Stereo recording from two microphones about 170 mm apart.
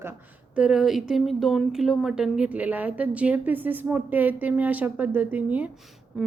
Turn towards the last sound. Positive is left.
turn(degrees=0)  # may be behind; listen again after turning